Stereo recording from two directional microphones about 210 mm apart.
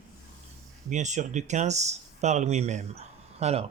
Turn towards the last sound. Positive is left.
turn(degrees=-30)  # may be behind; listen again after turning